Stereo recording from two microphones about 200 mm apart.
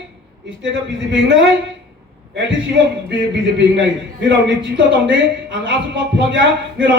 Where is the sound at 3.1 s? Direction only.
60° right (ahead or behind).